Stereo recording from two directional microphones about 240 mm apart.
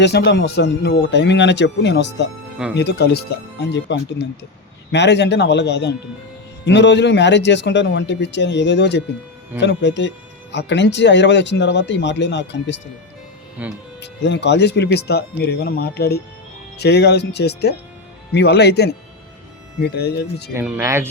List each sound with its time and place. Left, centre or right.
0.0 s speech: left
13.6 s speech: centre
14.0 s speech: left
20.5 s speech: centre